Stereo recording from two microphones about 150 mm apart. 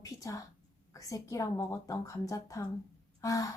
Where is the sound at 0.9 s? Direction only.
20° left (ahead or behind).